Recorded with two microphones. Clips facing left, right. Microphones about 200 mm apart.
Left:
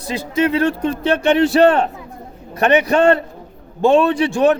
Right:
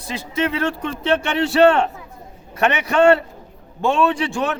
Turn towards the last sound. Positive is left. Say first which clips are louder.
# left 5 dB
turn(degrees=35)  # may be behind; listen again after turning